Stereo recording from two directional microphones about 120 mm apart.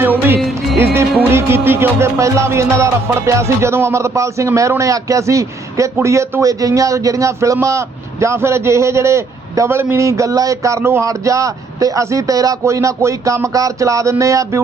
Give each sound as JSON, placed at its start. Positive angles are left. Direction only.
{"t": 0.0, "sound": "music", "side_deg": -15}
{"t": 1.3, "sound": "speech", "side_deg": -20}